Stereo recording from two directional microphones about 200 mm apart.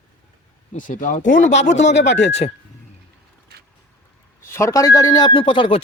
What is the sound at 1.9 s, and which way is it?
Speech, 60° left (ahead or behind).